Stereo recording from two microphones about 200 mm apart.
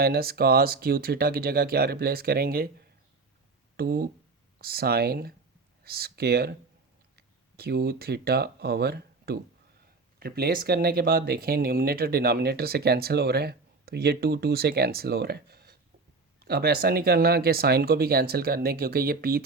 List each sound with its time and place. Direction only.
0.0 s speech: 50° right (ahead or behind)
3.8 s speech: 50° right (ahead or behind)